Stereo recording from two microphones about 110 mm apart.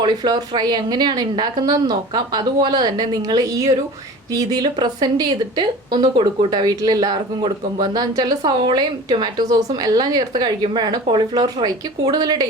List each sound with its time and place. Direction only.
0.0 s a woman's voice: 40° right (ahead or behind)